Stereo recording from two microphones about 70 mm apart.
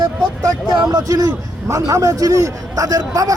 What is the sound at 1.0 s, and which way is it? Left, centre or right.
A man's voice, right.